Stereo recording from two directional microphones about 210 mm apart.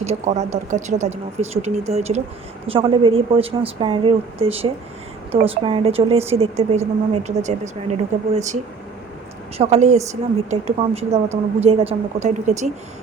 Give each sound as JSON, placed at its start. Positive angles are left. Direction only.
{"t": 0.0, "sound": "a woman's voice", "side_deg": -30}
{"t": 9.6, "sound": "a woman's voice", "side_deg": -30}